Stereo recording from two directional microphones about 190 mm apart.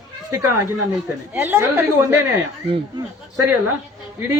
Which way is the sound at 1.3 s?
10° right (ahead or behind).